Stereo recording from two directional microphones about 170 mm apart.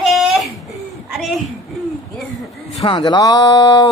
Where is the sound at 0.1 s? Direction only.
Centre (ahead or behind).